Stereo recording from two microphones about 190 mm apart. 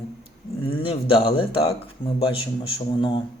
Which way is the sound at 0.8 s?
30° left (ahead or behind).